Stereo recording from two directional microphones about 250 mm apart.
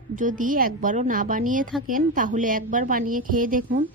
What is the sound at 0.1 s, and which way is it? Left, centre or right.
A woman's voice, right.